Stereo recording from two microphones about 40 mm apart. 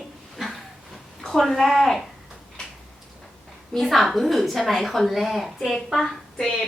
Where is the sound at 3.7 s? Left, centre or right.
Centre.